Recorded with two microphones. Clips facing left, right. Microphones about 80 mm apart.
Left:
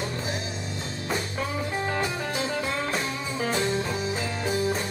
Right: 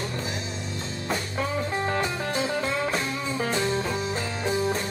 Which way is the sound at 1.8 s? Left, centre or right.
Centre.